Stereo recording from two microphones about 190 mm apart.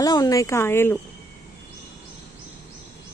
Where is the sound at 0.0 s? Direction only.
20° left (ahead or behind).